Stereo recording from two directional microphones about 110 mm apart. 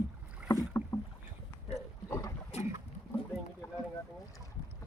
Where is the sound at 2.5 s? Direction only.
75° left (ahead or behind).